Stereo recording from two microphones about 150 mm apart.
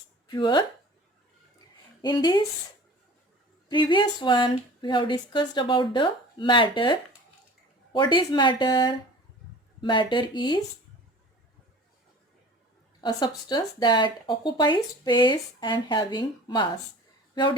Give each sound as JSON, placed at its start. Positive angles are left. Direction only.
{"t": 0.3, "sound": "speech", "side_deg": 30}
{"t": 2.0, "sound": "speech", "side_deg": 30}
{"t": 3.7, "sound": "speech", "side_deg": 30}
{"t": 13.0, "sound": "speech", "side_deg": 25}